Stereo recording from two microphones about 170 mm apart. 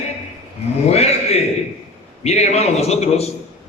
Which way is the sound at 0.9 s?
40° left (ahead or behind).